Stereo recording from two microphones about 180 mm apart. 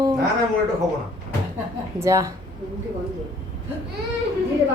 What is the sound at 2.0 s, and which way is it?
Speech, 15° right (ahead or behind).